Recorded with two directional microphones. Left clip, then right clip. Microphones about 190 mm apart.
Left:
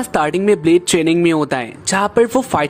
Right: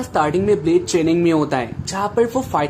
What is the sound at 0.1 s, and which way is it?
Speech, 45° left (ahead or behind).